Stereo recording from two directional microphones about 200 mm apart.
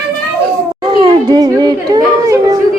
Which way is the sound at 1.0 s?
20° right (ahead or behind).